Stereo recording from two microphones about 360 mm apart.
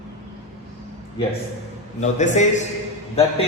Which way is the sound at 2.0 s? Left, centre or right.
Centre.